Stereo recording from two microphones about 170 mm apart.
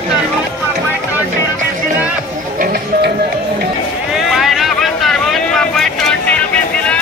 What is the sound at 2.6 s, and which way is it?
Music, 60° right (ahead or behind).